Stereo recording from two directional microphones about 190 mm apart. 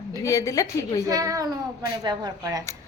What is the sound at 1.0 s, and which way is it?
A woman's voice, 15° right (ahead or behind).